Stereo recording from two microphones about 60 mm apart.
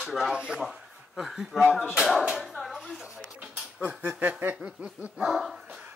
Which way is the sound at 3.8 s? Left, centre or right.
Right.